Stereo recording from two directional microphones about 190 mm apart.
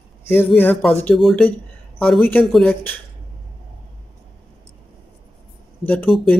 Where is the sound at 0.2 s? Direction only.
10° left (ahead or behind).